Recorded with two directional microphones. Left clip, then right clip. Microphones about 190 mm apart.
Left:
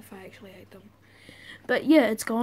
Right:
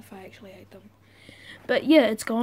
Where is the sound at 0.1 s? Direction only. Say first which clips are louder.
Right 1 dB; centre (ahead or behind).